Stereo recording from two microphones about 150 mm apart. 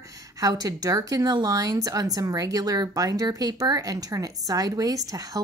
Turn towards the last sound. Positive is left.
turn(degrees=-25)  # may be behind; listen again after turning